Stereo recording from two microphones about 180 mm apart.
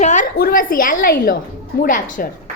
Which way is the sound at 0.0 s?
45° left (ahead or behind).